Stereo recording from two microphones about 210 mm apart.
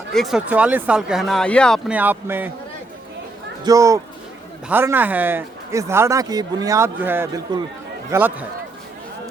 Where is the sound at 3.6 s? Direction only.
15° right (ahead or behind).